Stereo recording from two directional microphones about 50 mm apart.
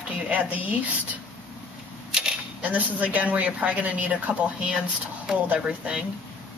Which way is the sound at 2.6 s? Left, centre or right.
Right.